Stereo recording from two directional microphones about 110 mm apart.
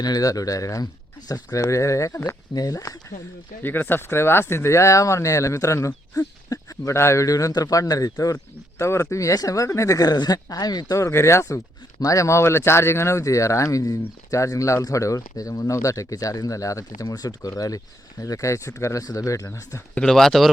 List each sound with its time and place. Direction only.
0.0 s speech: 35° left (ahead or behind)
3.6 s speech: 20° left (ahead or behind)
19.9 s speech: 5° left (ahead or behind)